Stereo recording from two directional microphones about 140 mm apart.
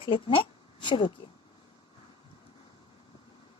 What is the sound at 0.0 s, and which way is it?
Speech, 40° left (ahead or behind).